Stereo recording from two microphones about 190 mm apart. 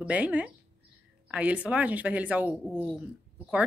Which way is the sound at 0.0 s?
5° right (ahead or behind).